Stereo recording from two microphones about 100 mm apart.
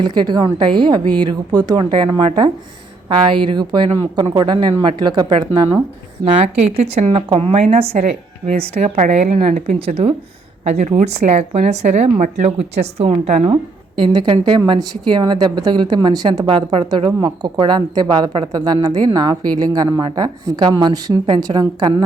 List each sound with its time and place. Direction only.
0.0 s a woman's voice: 45° right (ahead or behind)
6.2 s a woman's voice: 90° right
9.3 s speech: 75° right (ahead or behind)
10.6 s speech: 90° right
14.0 s a woman's voice: 50° right (ahead or behind)
16.5 s speech: 65° right (ahead or behind)
17.2 s a woman's voice: 45° right (ahead or behind)